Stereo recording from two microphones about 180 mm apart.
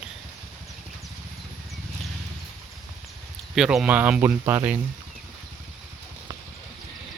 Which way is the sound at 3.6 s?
5° right (ahead or behind).